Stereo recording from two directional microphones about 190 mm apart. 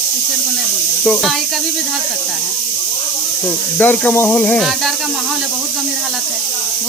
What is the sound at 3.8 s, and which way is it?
Speech, 10° left (ahead or behind).